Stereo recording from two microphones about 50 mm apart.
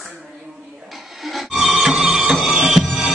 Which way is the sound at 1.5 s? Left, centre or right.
Centre.